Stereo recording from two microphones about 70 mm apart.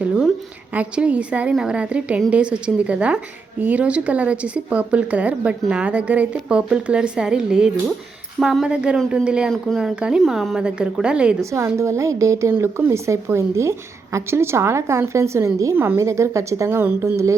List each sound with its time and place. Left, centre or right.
0.7 s speech: centre
11.5 s a woman's voice: right
15.7 s a woman's voice: right
16.0 s a woman's voice: right